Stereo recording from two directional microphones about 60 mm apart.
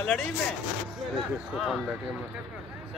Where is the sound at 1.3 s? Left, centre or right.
Centre.